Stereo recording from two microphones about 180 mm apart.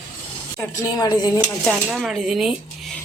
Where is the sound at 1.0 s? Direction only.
20° left (ahead or behind).